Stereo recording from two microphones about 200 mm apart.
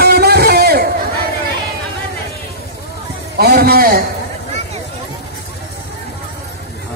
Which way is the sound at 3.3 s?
50° right (ahead or behind).